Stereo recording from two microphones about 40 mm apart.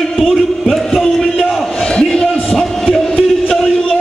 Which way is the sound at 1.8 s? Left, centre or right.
Centre.